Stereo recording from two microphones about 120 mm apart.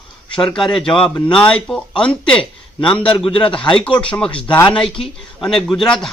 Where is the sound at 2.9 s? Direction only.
45° left (ahead or behind).